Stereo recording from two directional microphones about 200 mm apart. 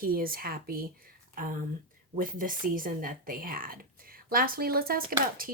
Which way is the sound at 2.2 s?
45° right (ahead or behind).